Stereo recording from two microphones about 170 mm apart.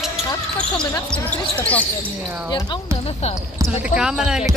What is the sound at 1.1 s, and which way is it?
Speech, 10° left (ahead or behind).